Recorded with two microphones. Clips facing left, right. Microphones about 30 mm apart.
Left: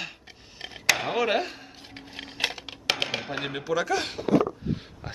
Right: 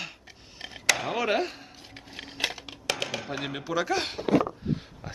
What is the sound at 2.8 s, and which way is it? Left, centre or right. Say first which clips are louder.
Computer keyboard: left 3 dB; left.